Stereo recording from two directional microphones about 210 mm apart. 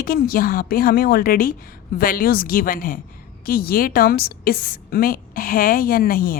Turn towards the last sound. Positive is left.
turn(degrees=45)  # may be behind; listen again after turning